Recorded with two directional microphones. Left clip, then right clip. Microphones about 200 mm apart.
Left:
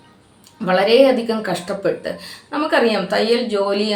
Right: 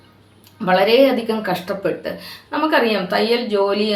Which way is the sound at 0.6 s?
5° right (ahead or behind).